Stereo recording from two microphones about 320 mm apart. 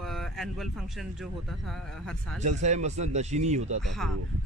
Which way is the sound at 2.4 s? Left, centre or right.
Right.